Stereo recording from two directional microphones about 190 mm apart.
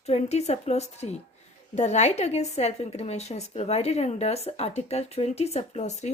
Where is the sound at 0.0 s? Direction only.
35° left (ahead or behind).